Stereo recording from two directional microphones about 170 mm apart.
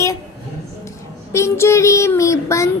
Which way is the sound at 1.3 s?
15° left (ahead or behind).